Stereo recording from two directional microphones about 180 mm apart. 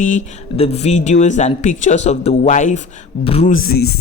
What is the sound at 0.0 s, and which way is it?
Speech, 40° left (ahead or behind).